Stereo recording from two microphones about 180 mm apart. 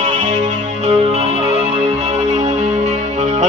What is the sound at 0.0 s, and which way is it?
Music, 40° right (ahead or behind).